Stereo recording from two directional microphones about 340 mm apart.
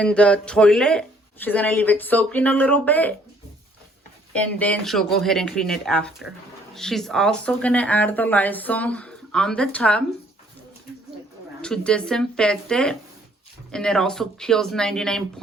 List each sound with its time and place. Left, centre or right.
0.0 s speech: centre
4.4 s speech: centre
11.6 s speech: centre